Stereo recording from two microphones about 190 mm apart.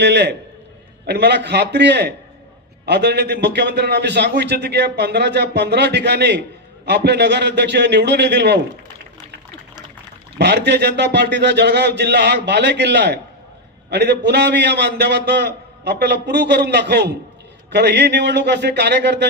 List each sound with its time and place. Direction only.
0.0 s a man's voice: 65° right (ahead or behind)
10.3 s a man's voice: 60° right (ahead or behind)